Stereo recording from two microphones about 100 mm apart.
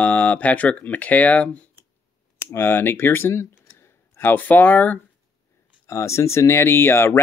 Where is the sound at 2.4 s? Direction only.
25° left (ahead or behind).